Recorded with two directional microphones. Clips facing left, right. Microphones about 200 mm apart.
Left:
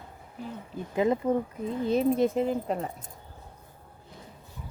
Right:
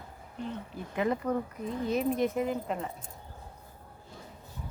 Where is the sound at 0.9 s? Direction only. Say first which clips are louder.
Left 4 dB; 25° left (ahead or behind); by 2.9 s 40° left (ahead or behind).